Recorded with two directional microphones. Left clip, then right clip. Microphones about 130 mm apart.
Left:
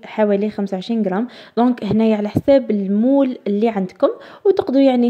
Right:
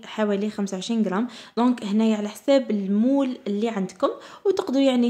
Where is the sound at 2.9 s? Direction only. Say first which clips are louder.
Left 6 dB; 20° left (ahead or behind).